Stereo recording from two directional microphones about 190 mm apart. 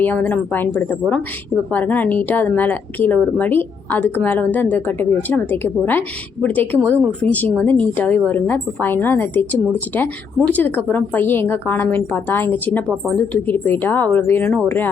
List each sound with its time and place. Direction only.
0.0 s a woman's voice: 10° left (ahead or behind)